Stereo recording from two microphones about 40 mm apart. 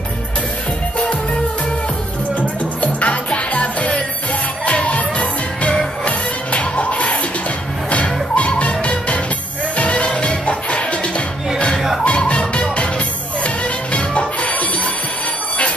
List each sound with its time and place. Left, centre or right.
2.8 s music: left
12.3 s music: left
13.9 s music: left